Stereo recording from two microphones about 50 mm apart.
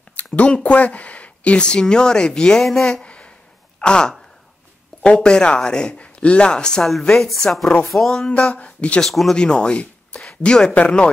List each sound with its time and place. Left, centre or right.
0.1 s a sound: left
0.7 s speech: left; by 2.9 s centre
2.9 s a sound: centre
3.8 s speech: centre
7.8 s music: centre
8.3 s speech: left
9.0 s music: centre
9.4 s speech: centre